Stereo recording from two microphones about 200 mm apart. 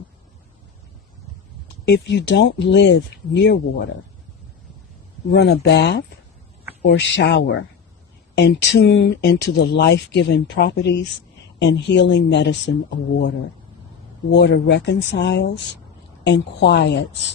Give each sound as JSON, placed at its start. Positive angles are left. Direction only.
{"t": 1.6, "sound": "speech", "side_deg": 55}
{"t": 5.3, "sound": "speech", "side_deg": 60}
{"t": 7.0, "sound": "speech", "side_deg": 65}
{"t": 14.3, "sound": "speech", "side_deg": 60}